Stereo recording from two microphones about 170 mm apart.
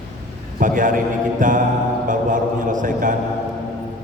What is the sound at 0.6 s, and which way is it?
A man's voice, 50° right (ahead or behind).